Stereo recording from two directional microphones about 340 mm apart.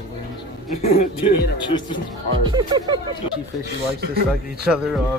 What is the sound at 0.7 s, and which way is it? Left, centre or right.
Speech, left.